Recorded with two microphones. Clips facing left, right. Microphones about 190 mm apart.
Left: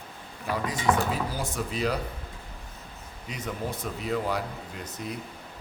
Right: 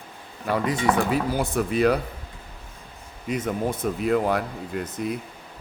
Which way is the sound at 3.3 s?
50° right (ahead or behind).